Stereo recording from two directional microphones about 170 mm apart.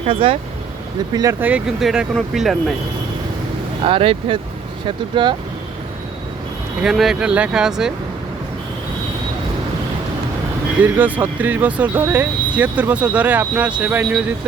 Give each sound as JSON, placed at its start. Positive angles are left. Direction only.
{"t": 0.0, "sound": "speech", "side_deg": -30}
{"t": 1.1, "sound": "speech", "side_deg": -20}
{"t": 3.8, "sound": "speech", "side_deg": -35}
{"t": 6.8, "sound": "speech", "side_deg": 0}
{"t": 10.8, "sound": "speech", "side_deg": -10}